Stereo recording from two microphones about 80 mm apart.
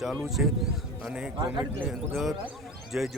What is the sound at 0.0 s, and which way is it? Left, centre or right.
Speech, centre.